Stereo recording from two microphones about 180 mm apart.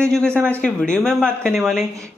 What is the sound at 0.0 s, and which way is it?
A man's voice, 5° left (ahead or behind).